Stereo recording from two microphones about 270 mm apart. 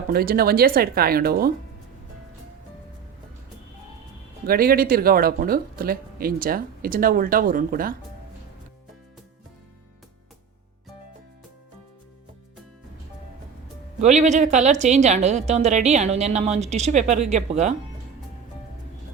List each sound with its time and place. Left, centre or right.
0.1 s speech: right
4.4 s speech: right
14.0 s a woman's voice: right